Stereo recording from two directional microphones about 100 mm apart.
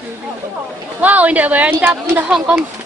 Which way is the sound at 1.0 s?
15° right (ahead or behind).